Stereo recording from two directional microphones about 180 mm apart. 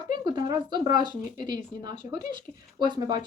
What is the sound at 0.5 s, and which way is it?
Speech, 25° right (ahead or behind).